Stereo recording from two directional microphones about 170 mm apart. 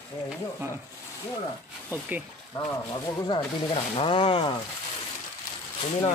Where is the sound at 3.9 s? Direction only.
30° left (ahead or behind).